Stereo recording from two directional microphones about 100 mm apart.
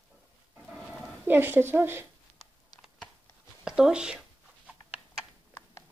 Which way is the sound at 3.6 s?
5° right (ahead or behind).